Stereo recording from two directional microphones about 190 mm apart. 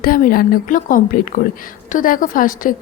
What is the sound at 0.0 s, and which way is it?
A woman's voice, 50° left (ahead or behind).